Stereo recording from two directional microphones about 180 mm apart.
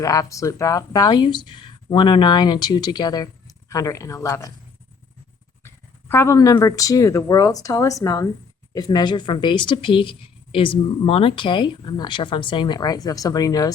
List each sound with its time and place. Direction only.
0.0 s speech: 20° left (ahead or behind)
5.6 s speech: 15° left (ahead or behind)